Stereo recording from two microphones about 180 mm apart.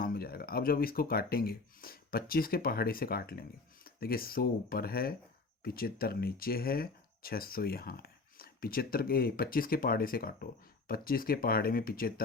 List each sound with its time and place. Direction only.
0.0 s speech: 55° left (ahead or behind)